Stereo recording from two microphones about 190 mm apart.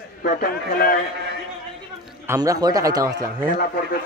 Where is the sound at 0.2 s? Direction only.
50° left (ahead or behind).